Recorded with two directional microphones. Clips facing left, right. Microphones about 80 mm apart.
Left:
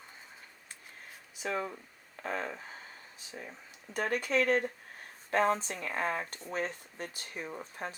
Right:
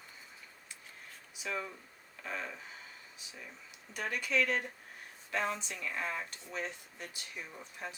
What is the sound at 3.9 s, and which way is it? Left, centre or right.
Speech, left.